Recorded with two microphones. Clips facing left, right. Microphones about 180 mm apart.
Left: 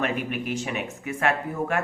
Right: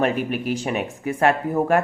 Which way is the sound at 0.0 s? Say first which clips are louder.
Right 5 dB; 35° right (ahead or behind).